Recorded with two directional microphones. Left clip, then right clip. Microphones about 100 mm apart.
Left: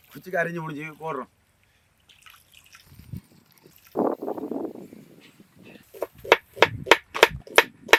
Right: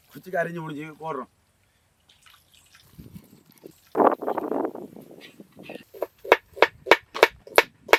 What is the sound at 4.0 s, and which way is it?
Stomach rumble, 40° right (ahead or behind).